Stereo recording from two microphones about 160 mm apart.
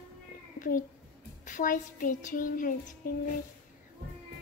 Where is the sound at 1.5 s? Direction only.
55° left (ahead or behind).